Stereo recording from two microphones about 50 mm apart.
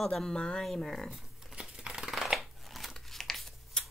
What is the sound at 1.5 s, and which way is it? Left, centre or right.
Scissors, centre.